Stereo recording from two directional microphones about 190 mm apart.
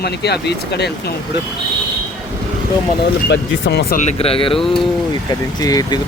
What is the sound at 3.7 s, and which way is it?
Speech, 60° left (ahead or behind).